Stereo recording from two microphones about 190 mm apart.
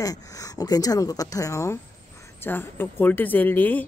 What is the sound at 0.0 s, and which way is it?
Speech, 20° left (ahead or behind).